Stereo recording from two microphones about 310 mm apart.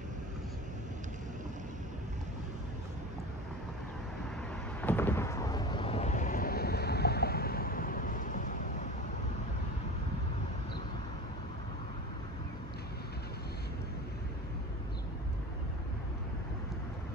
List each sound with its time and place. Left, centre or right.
4.8 s thunder: centre; by 8.5 s left